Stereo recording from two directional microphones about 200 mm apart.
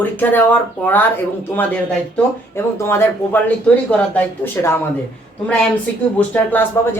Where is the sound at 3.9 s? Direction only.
10° left (ahead or behind).